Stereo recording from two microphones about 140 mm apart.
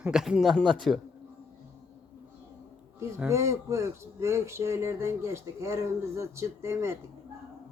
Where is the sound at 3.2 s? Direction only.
20° right (ahead or behind).